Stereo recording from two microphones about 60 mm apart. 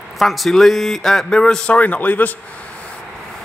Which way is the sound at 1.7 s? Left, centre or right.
Left.